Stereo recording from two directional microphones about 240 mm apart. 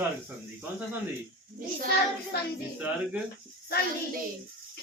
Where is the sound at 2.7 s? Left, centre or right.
Centre.